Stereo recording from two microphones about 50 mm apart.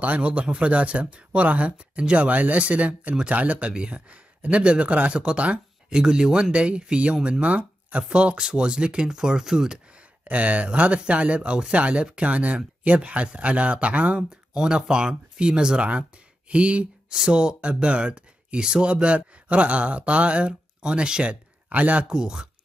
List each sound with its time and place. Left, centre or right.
0.0 s speech: right; by 9.8 s centre
10.2 s speech: right
14.3 s speech: centre
22.1 s speech: centre